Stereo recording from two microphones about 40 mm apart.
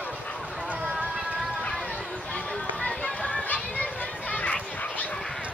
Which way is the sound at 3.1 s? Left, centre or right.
Left.